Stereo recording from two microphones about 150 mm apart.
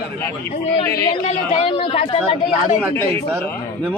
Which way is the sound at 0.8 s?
25° left (ahead or behind).